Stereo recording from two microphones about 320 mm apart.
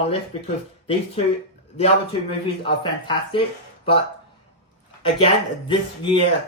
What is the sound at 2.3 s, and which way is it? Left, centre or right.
A man's voice, centre.